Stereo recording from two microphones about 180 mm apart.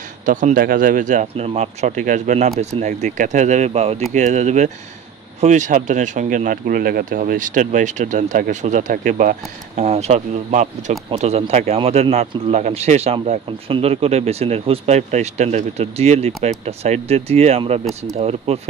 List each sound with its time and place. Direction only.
0.2 s speech: 45° right (ahead or behind)